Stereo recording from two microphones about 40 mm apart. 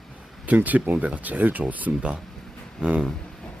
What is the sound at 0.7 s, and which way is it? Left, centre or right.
Speech, right.